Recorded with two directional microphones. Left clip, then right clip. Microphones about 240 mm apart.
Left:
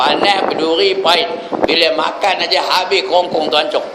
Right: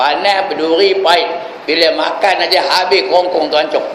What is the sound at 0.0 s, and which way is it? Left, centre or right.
A man's voice, left.